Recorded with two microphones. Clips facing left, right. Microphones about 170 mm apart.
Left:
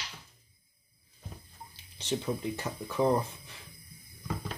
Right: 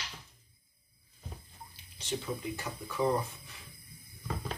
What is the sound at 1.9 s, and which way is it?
Speech, 25° left (ahead or behind).